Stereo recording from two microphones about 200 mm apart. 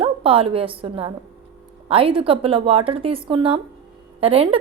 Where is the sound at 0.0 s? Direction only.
25° right (ahead or behind).